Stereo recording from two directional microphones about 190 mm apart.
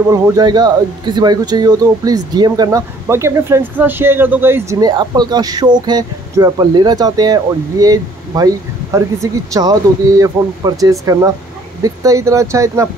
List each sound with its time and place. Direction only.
0.1 s speech: 20° right (ahead or behind)